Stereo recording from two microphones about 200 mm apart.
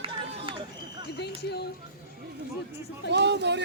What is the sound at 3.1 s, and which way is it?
Speech, 60° right (ahead or behind).